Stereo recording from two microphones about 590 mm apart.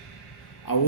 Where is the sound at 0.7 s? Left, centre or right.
Left.